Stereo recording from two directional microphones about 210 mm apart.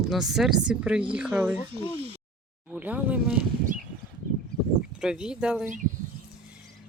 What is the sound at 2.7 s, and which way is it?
Speech, 5° right (ahead or behind).